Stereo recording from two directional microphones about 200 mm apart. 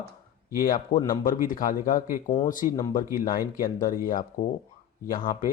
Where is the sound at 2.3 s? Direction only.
20° left (ahead or behind).